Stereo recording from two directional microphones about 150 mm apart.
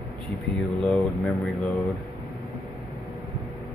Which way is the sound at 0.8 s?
5° left (ahead or behind).